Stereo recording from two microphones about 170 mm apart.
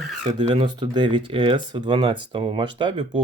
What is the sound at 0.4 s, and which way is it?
Speech, 30° right (ahead or behind).